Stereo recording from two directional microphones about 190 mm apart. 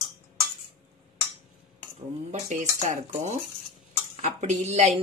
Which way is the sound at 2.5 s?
40° right (ahead or behind).